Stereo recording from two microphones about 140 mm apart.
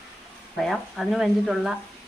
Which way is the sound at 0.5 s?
Centre (ahead or behind).